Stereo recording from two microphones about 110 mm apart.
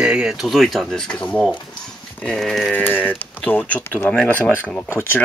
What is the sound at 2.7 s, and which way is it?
Speech, 15° left (ahead or behind).